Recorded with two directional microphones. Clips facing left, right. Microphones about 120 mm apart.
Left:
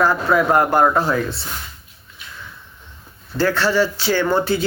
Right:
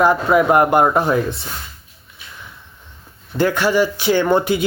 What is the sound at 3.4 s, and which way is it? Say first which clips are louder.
Speech: right 1 dB; 15° right (ahead or behind).